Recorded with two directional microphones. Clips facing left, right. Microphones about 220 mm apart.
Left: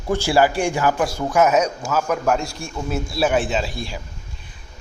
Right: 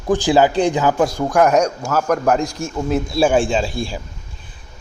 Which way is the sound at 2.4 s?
20° right (ahead or behind).